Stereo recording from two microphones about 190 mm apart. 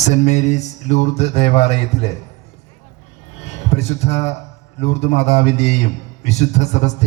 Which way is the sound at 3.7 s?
35° left (ahead or behind).